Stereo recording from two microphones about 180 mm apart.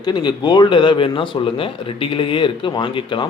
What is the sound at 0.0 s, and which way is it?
A man's voice, 25° left (ahead or behind).